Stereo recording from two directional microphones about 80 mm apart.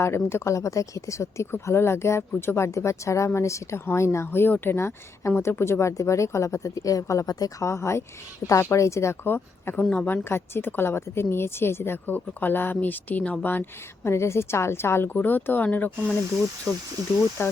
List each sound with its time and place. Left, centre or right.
0.0 s a woman's voice: left
7.6 s speech: left
9.2 s a woman's voice: left
17.4 s speech: left